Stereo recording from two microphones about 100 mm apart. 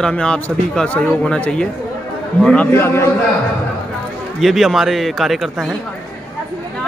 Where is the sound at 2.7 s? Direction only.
25° left (ahead or behind).